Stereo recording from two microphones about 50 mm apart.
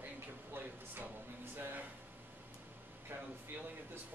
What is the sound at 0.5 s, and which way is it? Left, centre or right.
Speech, right.